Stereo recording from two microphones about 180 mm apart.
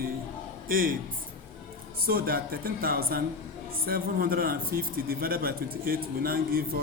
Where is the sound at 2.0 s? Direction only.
55° right (ahead or behind).